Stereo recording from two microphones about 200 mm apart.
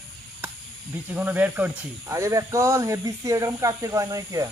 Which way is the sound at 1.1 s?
10° right (ahead or behind).